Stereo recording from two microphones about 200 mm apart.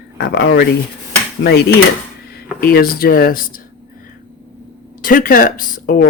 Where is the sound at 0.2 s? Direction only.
55° left (ahead or behind).